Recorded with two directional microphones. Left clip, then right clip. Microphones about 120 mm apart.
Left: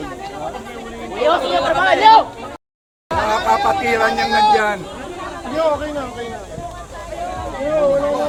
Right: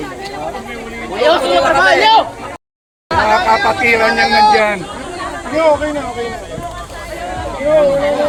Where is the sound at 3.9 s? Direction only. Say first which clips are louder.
Right 5 dB; 30° left (ahead or behind).